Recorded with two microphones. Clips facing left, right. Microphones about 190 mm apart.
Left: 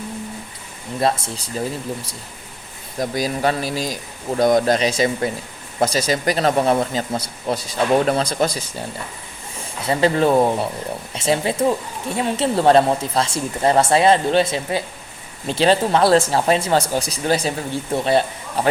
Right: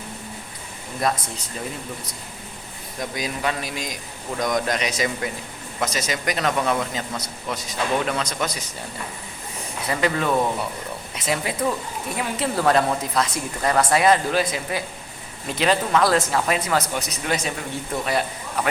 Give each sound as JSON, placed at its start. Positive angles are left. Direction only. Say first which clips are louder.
{"t": 1.0, "sound": "speech", "louder": "left 4 dB", "side_deg": 30}
{"t": 3.0, "sound": "speech", "louder": "left 6 dB", "side_deg": 35}
{"t": 9.8, "sound": "speech", "louder": "left 6 dB", "side_deg": 30}